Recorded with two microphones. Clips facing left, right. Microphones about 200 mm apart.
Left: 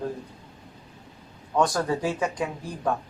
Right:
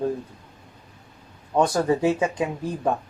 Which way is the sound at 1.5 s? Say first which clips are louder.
Right 4 dB; 25° right (ahead or behind).